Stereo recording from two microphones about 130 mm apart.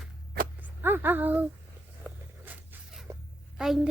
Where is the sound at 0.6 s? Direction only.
15° right (ahead or behind).